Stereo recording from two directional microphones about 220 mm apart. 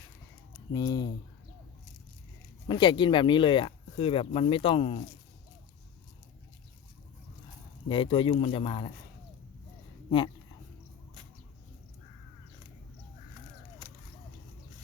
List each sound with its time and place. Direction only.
0.7 s speech: 15° left (ahead or behind)
2.6 s speech: 20° left (ahead or behind)
7.9 s speech: 25° left (ahead or behind)